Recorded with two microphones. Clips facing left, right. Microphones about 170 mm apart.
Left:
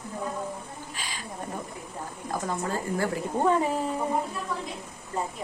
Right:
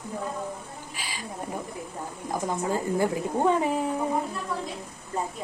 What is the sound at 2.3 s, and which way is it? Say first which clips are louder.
Speech: right 2 dB; 15° right (ahead or behind).